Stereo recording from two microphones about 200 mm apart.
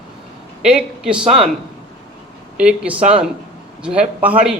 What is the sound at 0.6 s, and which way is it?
Speech, 5° right (ahead or behind).